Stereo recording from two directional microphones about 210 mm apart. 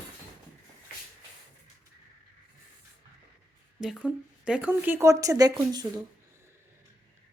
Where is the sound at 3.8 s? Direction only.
5° right (ahead or behind).